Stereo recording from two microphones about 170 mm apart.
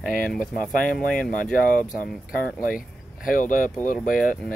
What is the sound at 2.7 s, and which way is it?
Speech, 55° left (ahead or behind).